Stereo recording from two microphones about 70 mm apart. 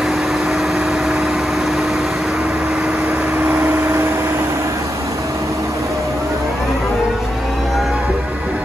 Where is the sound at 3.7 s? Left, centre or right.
Right.